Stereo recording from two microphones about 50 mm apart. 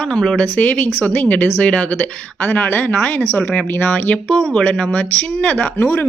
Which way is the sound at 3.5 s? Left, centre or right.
Left.